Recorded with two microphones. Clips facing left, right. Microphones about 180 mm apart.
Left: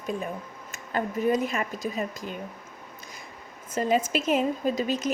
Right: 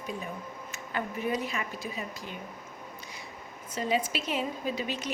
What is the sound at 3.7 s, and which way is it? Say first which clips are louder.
A woman's voice: left 5 dB; 45° left (ahead or behind).